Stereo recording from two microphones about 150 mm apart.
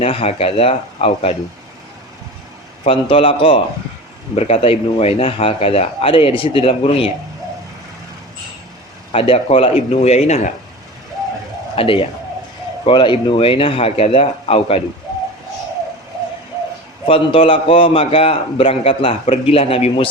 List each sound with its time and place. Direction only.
0.0 s a man's voice: 40° left (ahead or behind)
2.8 s a man's voice: 35° left (ahead or behind)
9.1 s speech: 40° left (ahead or behind)
11.8 s a man's voice: 35° left (ahead or behind)
17.1 s a man's voice: 35° left (ahead or behind)